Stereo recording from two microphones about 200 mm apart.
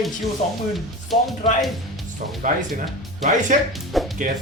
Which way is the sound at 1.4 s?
35° left (ahead or behind).